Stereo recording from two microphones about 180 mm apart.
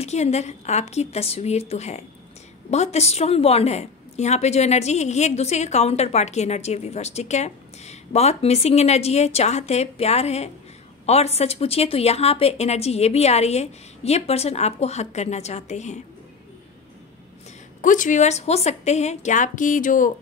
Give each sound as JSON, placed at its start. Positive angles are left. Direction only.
{"t": 0.0, "sound": "a woman's voice", "side_deg": 35}
{"t": 17.8, "sound": "a woman's voice", "side_deg": 45}